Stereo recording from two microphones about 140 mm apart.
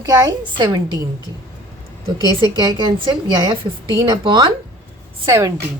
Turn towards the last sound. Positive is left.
turn(degrees=-25)  # may be behind; listen again after turning